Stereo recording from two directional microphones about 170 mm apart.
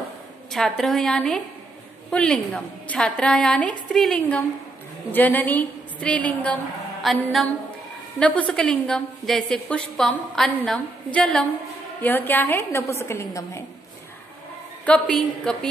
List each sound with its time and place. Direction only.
0.5 s a woman's voice: centre (ahead or behind); by 13.7 s 15° left (ahead or behind)
14.9 s a woman's voice: 5° left (ahead or behind)